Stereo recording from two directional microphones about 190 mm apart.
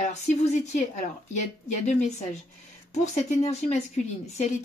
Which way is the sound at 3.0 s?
35° left (ahead or behind).